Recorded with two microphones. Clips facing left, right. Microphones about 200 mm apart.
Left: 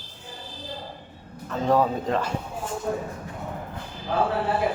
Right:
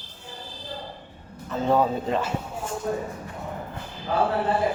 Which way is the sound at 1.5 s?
Centre (ahead or behind).